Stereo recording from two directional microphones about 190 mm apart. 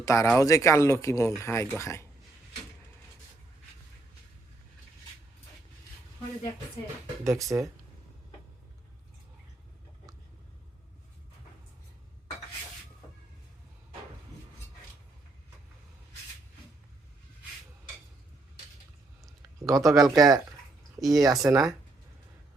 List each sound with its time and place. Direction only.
0.0 s speech: 15° left (ahead or behind)
7.3 s speech: 15° right (ahead or behind)
19.6 s speech: 20° right (ahead or behind)